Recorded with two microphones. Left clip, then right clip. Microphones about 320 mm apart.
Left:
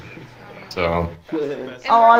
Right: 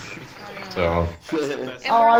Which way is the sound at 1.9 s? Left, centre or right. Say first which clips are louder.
Left 3 dB; centre.